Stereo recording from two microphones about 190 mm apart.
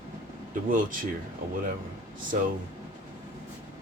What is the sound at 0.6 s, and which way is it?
Speech, 45° right (ahead or behind).